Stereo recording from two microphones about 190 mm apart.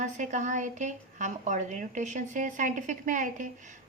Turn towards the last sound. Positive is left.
turn(degrees=-40)  # may be behind; listen again after turning